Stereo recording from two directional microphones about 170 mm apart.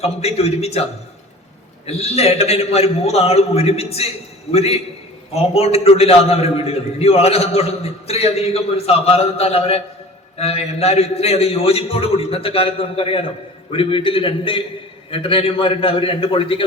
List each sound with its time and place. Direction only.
0.0 s a man's voice: 35° left (ahead or behind)
1.9 s a man's voice: 35° left (ahead or behind)